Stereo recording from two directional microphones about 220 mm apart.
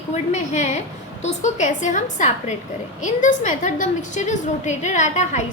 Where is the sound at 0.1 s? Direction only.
30° left (ahead or behind).